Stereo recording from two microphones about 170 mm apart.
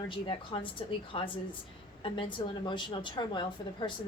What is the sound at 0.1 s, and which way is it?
A woman's voice, 30° left (ahead or behind).